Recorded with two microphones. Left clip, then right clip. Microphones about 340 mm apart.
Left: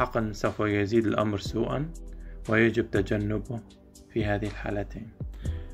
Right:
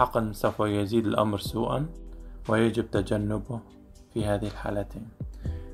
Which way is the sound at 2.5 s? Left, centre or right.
Centre.